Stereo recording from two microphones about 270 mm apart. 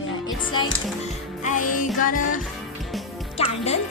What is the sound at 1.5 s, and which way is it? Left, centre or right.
Music, left.